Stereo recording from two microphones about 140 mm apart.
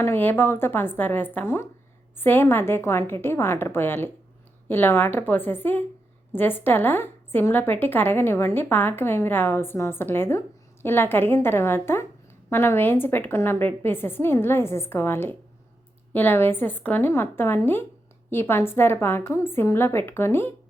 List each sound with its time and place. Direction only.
0.0 s a woman's voice: 15° left (ahead or behind)